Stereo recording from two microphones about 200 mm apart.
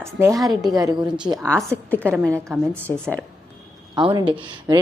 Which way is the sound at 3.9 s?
25° right (ahead or behind).